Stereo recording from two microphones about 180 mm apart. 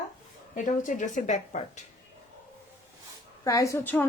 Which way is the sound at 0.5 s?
45° left (ahead or behind).